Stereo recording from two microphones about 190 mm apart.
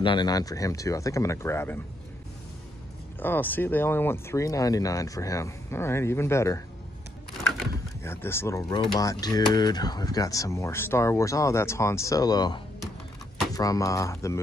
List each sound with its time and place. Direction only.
0.0 s speech: 25° left (ahead or behind)
3.2 s speech: 10° left (ahead or behind)
8.0 s speech: 15° left (ahead or behind)